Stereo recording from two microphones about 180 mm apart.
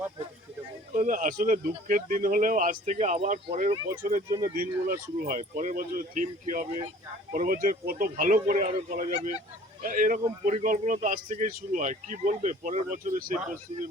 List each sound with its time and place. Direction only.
0.9 s speech: 45° right (ahead or behind)